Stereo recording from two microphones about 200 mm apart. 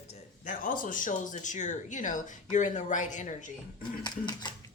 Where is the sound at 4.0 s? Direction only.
20° left (ahead or behind).